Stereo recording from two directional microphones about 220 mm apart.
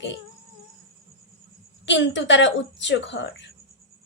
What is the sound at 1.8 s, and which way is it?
A woman's voice, 55° left (ahead or behind).